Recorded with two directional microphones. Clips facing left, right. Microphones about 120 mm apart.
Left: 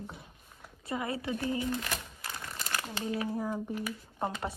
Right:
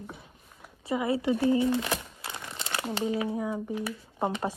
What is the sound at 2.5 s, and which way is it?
Shuffling cards, 25° right (ahead or behind).